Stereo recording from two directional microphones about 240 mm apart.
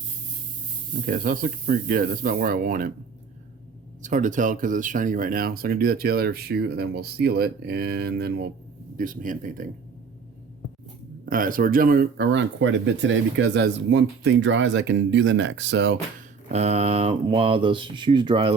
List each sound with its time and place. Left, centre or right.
1.0 s speech: right
4.0 s speech: right
11.3 s speech: right
16.5 s speech: right